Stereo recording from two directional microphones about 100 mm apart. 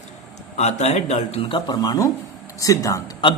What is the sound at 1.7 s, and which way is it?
Speech, 40° left (ahead or behind).